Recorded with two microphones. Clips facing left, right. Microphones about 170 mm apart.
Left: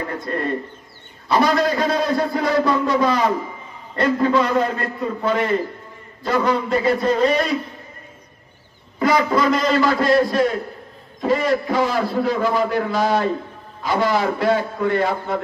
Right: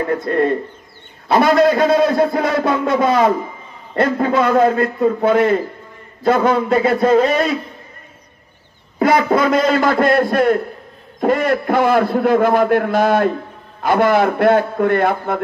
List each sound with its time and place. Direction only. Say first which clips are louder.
1.3 s a man's voice: right 5 dB; 55° right (ahead or behind)
9.0 s a man's voice: right 3 dB; 50° right (ahead or behind)